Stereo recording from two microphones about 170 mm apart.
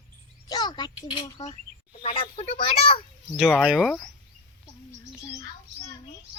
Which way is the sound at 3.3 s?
5° right (ahead or behind).